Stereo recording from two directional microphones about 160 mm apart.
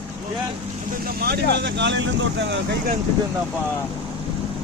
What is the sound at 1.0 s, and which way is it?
Speech, 75° right (ahead or behind).